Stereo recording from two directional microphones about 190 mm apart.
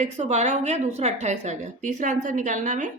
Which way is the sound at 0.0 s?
35° right (ahead or behind).